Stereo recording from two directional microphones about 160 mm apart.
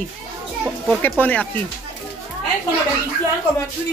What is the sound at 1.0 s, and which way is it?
Speech, 10° left (ahead or behind).